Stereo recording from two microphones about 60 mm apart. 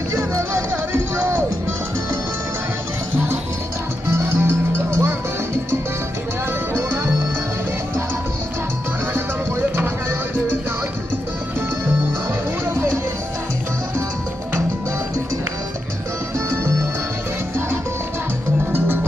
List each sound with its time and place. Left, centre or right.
0.1 s music: right
4.1 s music: right
9.1 s music: right